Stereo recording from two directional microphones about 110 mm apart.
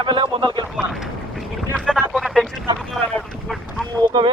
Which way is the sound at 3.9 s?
45° right (ahead or behind).